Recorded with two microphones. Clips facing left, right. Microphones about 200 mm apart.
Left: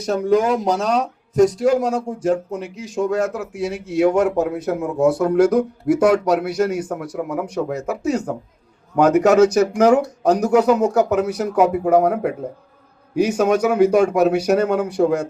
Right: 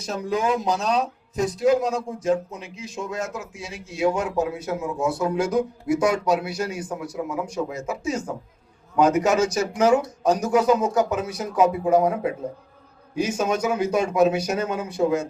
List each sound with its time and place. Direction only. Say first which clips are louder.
0.1 s speech: left 7 dB; 55° left (ahead or behind)
2.5 s speech: left 8 dB; 70° left (ahead or behind)